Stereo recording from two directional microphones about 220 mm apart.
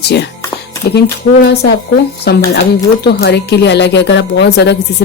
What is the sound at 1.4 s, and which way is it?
Speech, 50° left (ahead or behind).